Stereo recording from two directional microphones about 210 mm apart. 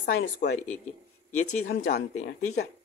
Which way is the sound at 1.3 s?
35° left (ahead or behind).